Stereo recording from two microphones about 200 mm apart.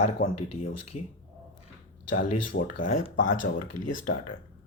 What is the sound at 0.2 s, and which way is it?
Speech, 45° left (ahead or behind).